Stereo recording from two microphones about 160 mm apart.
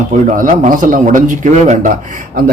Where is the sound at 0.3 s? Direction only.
55° right (ahead or behind).